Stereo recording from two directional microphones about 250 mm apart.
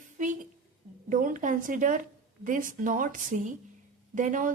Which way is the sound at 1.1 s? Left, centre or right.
Right.